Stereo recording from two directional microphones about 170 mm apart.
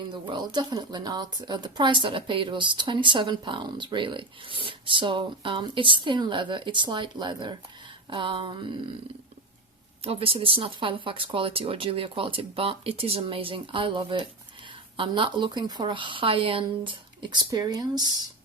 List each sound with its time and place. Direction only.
0.1 s speech: 25° right (ahead or behind)
10.0 s speech: 35° right (ahead or behind)